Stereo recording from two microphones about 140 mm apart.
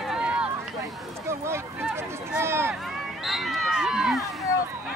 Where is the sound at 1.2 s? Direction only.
20° right (ahead or behind).